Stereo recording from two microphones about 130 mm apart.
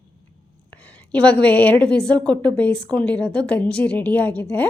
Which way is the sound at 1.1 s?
10° left (ahead or behind).